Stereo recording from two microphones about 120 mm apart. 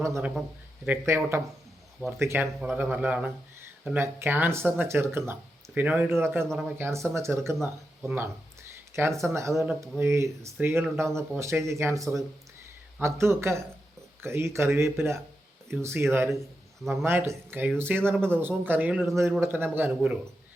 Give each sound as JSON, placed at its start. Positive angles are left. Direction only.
{"t": 0.9, "sound": "speech", "side_deg": -20}